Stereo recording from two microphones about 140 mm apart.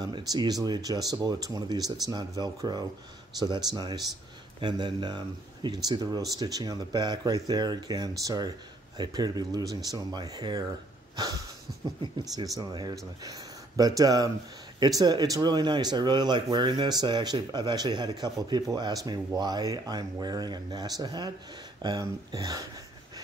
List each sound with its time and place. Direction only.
0.0 s speech: 30° right (ahead or behind)
12.0 s speech: 35° right (ahead or behind)